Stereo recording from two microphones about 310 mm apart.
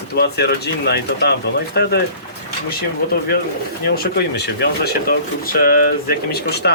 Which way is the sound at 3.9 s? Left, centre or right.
Left.